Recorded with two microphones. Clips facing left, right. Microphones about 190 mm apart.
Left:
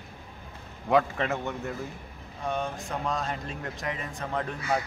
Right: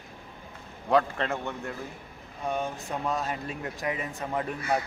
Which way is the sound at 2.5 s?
5° right (ahead or behind).